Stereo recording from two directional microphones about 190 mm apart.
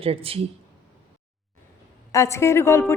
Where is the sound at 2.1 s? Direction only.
15° left (ahead or behind).